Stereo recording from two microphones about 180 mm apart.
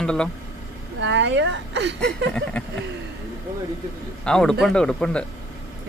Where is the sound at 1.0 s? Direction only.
80° right.